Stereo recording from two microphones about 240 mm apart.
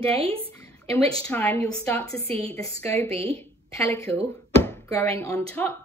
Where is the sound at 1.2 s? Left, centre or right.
Centre.